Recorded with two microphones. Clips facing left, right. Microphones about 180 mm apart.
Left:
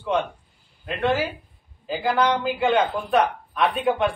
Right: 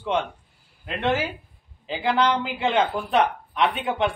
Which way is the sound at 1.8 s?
20° right (ahead or behind).